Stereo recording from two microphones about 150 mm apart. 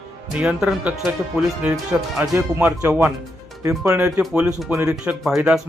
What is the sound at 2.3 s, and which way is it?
Speech, 20° right (ahead or behind).